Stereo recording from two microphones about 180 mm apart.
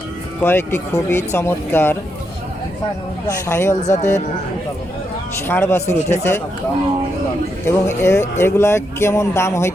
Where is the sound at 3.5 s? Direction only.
15° left (ahead or behind).